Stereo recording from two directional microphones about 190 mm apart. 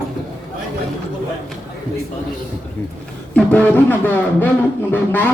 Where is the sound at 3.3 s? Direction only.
10° left (ahead or behind).